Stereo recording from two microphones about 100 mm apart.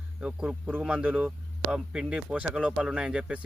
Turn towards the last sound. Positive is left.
turn(degrees=-10)  # may be behind; listen again after turning